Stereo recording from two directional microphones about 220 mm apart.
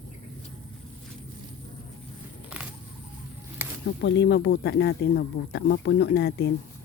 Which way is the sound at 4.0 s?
55° left (ahead or behind).